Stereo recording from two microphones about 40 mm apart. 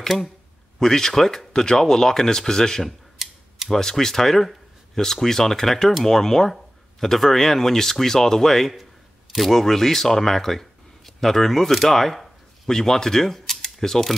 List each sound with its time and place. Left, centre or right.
0.7 s speech: centre
3.2 s a sound: centre
3.6 s speech: centre